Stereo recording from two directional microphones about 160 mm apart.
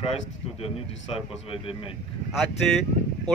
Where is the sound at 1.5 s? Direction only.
35° left (ahead or behind).